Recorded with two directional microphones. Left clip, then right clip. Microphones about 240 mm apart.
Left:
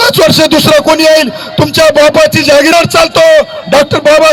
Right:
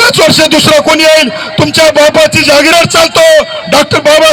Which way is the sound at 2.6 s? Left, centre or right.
Left.